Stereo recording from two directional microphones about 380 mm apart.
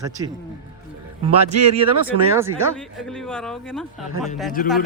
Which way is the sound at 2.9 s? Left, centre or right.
Centre.